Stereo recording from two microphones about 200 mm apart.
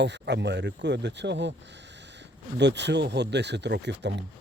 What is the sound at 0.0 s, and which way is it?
Speech, 60° right (ahead or behind).